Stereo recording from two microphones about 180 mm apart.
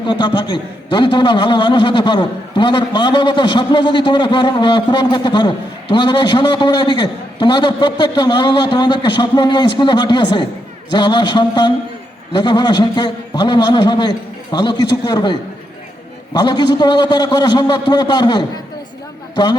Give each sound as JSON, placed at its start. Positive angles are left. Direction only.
{"t": 0.0, "sound": "a man's voice", "side_deg": 25}